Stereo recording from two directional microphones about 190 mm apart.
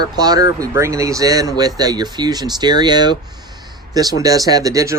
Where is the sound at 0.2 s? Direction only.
20° right (ahead or behind).